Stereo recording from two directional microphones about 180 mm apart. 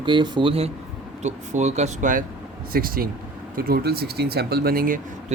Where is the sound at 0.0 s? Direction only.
25° right (ahead or behind).